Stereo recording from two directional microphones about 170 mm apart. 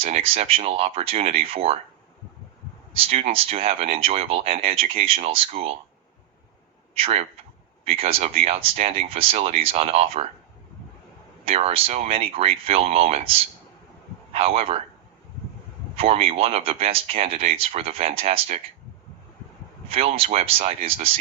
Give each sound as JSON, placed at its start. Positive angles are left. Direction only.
{"t": 0.0, "sound": "speech", "side_deg": -35}
{"t": 2.9, "sound": "speech", "side_deg": -35}
{"t": 6.9, "sound": "speech", "side_deg": -35}
{"t": 11.4, "sound": "speech", "side_deg": -35}
{"t": 16.0, "sound": "speech", "side_deg": -35}
{"t": 19.9, "sound": "speech", "side_deg": -35}